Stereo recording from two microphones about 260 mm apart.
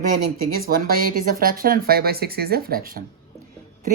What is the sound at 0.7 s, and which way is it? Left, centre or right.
Speech, right.